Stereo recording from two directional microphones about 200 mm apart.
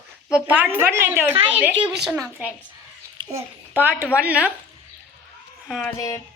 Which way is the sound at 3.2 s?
25° right (ahead or behind).